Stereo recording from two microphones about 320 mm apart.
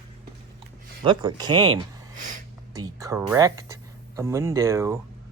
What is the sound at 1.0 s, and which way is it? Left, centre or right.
Speech, centre.